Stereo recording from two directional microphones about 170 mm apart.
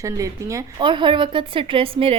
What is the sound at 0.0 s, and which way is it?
A woman's voice, 20° right (ahead or behind).